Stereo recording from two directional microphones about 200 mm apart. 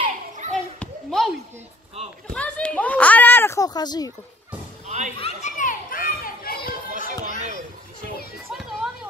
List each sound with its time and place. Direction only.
0.0 s children playing: 35° right (ahead or behind)
0.7 s children playing: centre (ahead or behind)
2.3 s a sound: 5° left (ahead or behind)
4.8 s a sound: 35° right (ahead or behind)
5.2 s children playing: 40° left (ahead or behind)
7.1 s music: 35° right (ahead or behind)
8.5 s children playing: centre (ahead or behind)